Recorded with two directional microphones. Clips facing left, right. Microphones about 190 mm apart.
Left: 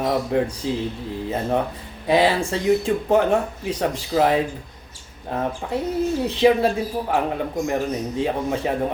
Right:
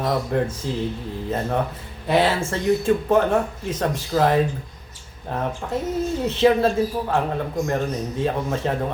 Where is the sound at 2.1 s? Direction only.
15° left (ahead or behind).